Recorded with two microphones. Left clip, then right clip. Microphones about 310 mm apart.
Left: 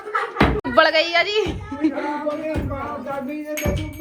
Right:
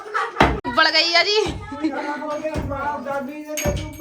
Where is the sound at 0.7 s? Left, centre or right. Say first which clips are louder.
Left 4 dB; centre.